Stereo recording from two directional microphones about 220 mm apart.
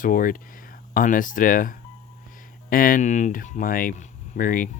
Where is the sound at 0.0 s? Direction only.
40° left (ahead or behind).